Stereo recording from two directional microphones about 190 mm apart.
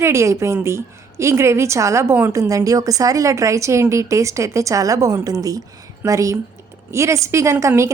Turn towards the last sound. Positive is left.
turn(degrees=-15)  # may be behind; listen again after turning